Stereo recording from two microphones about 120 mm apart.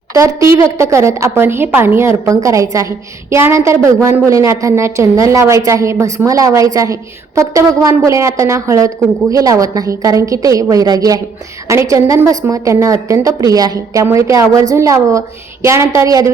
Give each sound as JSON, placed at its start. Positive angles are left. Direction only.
{"t": 0.1, "sound": "a woman's voice", "side_deg": -25}